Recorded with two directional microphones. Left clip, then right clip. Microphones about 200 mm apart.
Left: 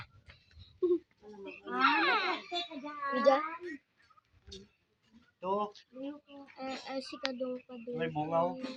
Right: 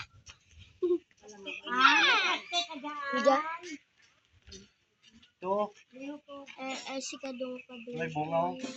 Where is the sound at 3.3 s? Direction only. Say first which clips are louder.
Right 1 dB; 40° right (ahead or behind).